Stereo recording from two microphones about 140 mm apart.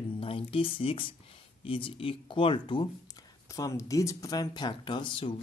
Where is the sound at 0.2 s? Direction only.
40° left (ahead or behind).